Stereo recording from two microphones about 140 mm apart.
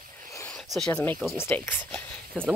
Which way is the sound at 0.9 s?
15° left (ahead or behind).